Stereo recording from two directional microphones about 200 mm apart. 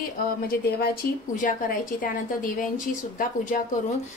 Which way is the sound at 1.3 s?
40° left (ahead or behind).